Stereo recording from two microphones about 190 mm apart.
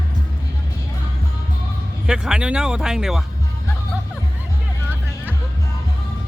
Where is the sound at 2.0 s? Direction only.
5° right (ahead or behind).